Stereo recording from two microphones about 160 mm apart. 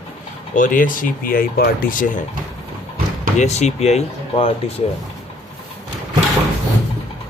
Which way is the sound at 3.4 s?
45° left (ahead or behind).